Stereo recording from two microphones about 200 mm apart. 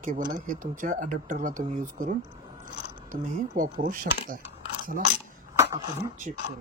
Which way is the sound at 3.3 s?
40° right (ahead or behind).